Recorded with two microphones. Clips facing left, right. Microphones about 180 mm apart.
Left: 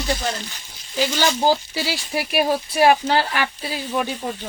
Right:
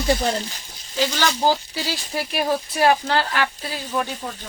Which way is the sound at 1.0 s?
15° left (ahead or behind).